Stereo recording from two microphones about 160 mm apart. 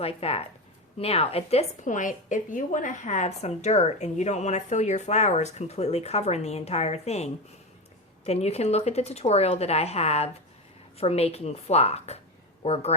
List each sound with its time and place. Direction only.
0.0 s a woman's voice: 40° left (ahead or behind)